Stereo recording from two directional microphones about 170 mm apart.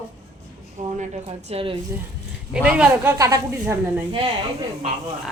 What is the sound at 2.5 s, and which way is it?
Speech, 5° right (ahead or behind).